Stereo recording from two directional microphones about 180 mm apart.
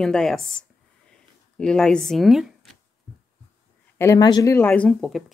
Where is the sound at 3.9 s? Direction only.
20° left (ahead or behind); by 5.2 s centre (ahead or behind).